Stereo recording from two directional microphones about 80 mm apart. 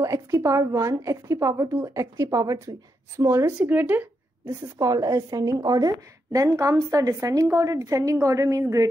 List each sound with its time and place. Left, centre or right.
0.0 s a woman's voice: right
2.2 s a woman's voice: right
3.5 s speech: right
4.7 s a woman's voice: right